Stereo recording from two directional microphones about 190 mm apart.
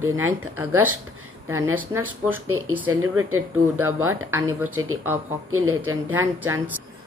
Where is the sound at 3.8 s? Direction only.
90° right.